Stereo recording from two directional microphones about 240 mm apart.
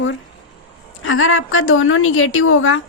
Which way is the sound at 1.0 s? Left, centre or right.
Left.